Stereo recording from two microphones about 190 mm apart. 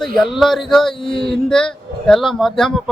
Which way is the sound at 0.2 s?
Centre (ahead or behind).